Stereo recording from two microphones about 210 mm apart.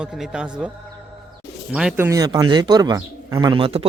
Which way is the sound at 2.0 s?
15° right (ahead or behind).